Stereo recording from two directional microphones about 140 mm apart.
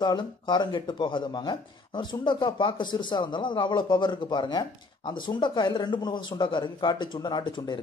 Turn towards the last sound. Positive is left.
turn(degrees=30)  # may be behind; listen again after turning